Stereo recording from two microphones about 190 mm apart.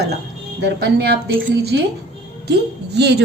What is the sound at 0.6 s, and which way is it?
A woman's voice, 60° right (ahead or behind).